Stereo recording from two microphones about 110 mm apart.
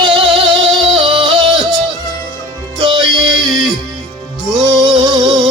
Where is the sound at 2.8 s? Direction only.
50° right (ahead or behind).